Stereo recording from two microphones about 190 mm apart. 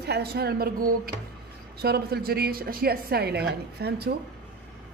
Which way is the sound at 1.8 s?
55° right (ahead or behind).